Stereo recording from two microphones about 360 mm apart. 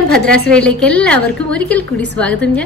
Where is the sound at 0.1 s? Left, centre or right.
Centre.